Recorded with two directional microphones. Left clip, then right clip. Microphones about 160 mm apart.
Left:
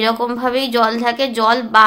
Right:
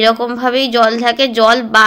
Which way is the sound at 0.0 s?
15° right (ahead or behind).